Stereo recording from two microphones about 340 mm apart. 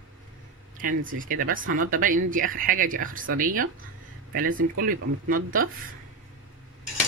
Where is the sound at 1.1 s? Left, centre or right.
Right.